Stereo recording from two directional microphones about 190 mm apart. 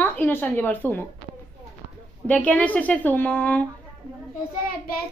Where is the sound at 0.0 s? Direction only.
10° left (ahead or behind).